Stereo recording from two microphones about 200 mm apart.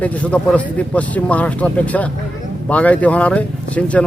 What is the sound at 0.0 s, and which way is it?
Speech, 5° left (ahead or behind).